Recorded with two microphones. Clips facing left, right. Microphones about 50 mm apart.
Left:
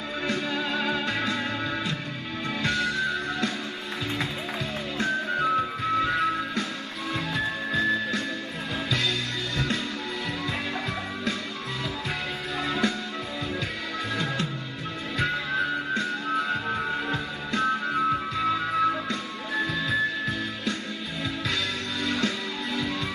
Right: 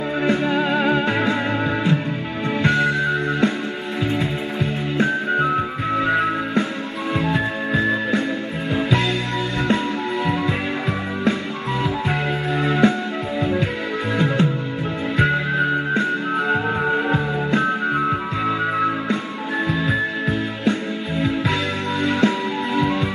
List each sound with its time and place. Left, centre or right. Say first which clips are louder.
0.2 s music: right 9 dB; right
4.9 s music: right 7 dB; right
12.1 s music: right 9 dB; right
22.0 s music: right 9 dB; right